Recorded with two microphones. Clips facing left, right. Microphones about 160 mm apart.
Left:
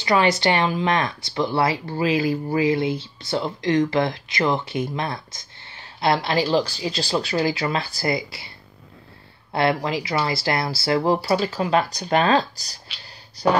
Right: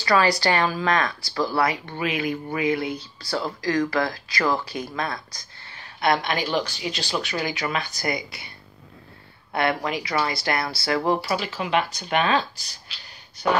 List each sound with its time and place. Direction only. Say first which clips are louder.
0.0 s speech: left 1 dB; 20° left (ahead or behind)